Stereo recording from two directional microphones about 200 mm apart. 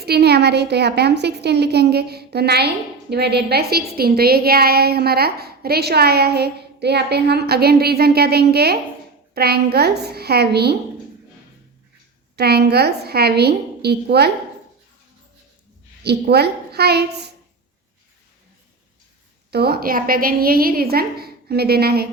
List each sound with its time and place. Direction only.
0.0 s a woman's voice: 55° right (ahead or behind)
12.4 s a woman's voice: 55° right (ahead or behind)
16.0 s a woman's voice: 55° right (ahead or behind)
19.5 s a woman's voice: 55° right (ahead or behind)